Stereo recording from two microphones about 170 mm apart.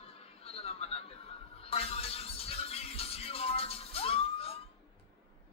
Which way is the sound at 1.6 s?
35° left (ahead or behind).